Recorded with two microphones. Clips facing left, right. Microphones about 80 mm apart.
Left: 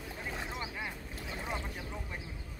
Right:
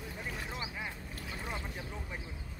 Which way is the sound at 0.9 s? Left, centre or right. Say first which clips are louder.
Left 1 dB; centre.